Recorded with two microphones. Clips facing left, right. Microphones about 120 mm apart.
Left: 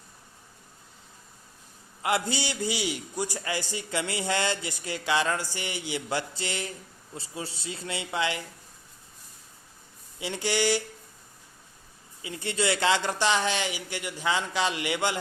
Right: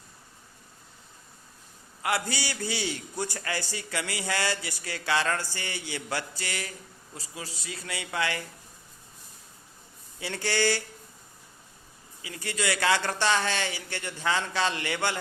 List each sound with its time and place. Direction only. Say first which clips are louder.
2.0 s a man's voice: left 2 dB; 20° left (ahead or behind)
10.2 s speech: left 1 dB; 15° left (ahead or behind)
12.2 s speech: left 3 dB; 25° left (ahead or behind)